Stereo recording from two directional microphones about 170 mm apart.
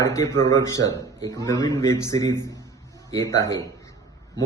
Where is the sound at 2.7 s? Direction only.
20° left (ahead or behind).